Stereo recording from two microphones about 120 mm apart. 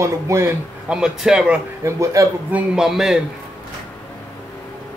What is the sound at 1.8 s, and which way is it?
Speech, 25° right (ahead or behind).